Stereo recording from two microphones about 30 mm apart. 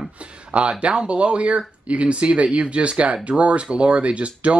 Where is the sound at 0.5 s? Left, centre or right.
Right.